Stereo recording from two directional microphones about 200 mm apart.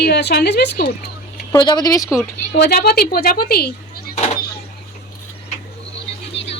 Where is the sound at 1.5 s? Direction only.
20° left (ahead or behind).